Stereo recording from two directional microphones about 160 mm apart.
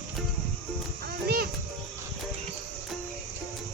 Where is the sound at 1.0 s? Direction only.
70° right (ahead or behind).